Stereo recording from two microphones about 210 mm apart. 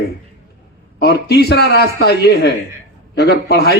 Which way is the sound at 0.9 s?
50° left (ahead or behind).